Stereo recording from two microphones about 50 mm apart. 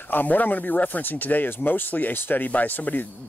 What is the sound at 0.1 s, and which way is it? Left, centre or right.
Speech, left.